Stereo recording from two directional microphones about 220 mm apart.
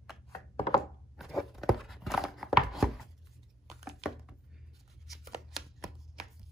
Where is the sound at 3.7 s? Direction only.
Centre (ahead or behind).